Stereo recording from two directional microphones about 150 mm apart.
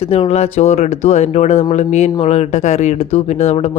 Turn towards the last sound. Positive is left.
turn(degrees=45)  # may be behind; listen again after turning